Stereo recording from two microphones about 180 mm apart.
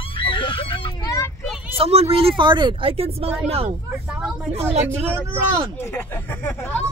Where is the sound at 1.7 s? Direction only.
35° right (ahead or behind).